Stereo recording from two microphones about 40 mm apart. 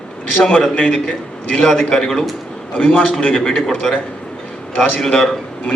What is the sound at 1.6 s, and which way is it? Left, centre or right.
Speech, centre.